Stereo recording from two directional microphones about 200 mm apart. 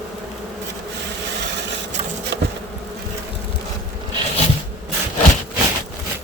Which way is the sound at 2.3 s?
60° right (ahead or behind).